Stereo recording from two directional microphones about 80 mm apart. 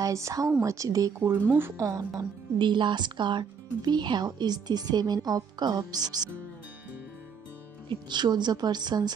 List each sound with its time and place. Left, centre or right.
0.0 s a woman's voice: right
2.6 s speech: right
7.9 s speech: right